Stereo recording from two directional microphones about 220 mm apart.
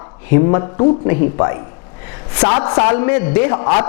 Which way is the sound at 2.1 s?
20° left (ahead or behind).